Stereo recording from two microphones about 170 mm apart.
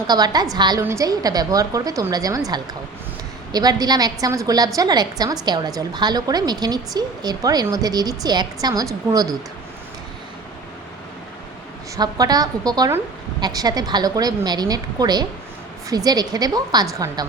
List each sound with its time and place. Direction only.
0.1 s a woman's voice: 25° right (ahead or behind)
3.5 s a woman's voice: 20° right (ahead or behind)
11.9 s a woman's voice: 25° right (ahead or behind)